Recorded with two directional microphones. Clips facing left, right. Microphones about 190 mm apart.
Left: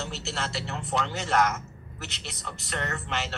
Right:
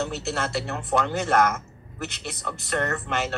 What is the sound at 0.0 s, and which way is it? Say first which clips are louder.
Speech: right 6 dB; 55° right (ahead or behind).